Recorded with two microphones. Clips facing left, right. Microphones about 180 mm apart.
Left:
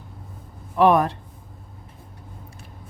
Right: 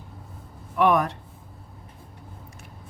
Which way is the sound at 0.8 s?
30° left (ahead or behind).